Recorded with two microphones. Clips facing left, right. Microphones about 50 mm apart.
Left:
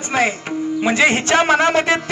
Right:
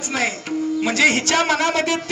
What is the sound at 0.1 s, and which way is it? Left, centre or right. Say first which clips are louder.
A man's voice: left 4 dB; left.